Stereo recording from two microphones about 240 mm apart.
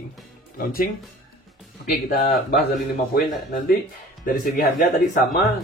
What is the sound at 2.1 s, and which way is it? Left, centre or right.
Speech, left.